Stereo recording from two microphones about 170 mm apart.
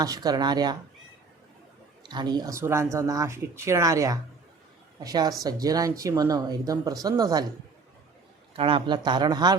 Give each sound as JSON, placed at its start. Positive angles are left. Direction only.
{"t": 0.0, "sound": "speech", "side_deg": -20}
{"t": 2.0, "sound": "speech", "side_deg": -25}
{"t": 8.5, "sound": "speech", "side_deg": -30}